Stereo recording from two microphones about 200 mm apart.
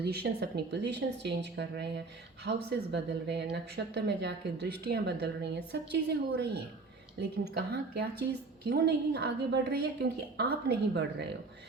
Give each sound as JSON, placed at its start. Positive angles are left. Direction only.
{"t": 0.0, "sound": "speech", "side_deg": -55}